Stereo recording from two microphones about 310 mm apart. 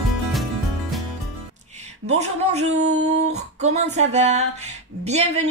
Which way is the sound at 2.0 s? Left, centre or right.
Right.